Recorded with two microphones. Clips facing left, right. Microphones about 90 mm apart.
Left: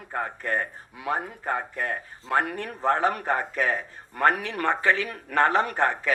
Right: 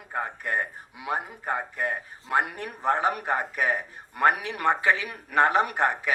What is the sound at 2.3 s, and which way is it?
Speech, 15° right (ahead or behind).